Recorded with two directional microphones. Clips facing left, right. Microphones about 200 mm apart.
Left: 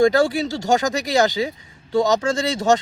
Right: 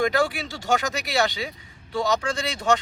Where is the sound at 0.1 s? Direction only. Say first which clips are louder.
Left 6 dB; 40° left (ahead or behind).